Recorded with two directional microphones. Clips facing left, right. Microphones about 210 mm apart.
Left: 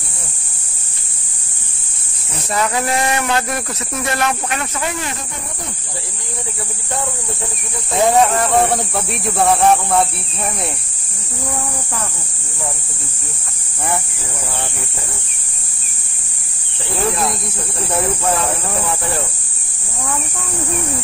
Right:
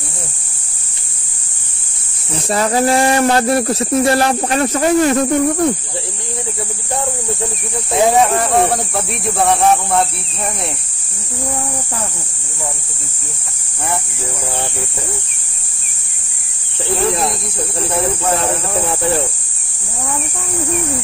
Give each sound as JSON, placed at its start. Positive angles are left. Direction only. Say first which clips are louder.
{"t": 2.3, "sound": "speech", "louder": "right 4 dB", "side_deg": -30}
{"t": 8.1, "sound": "speech", "louder": "left 2 dB", "side_deg": 0}